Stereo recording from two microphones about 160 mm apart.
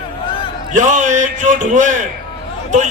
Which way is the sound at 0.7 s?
50° right (ahead or behind).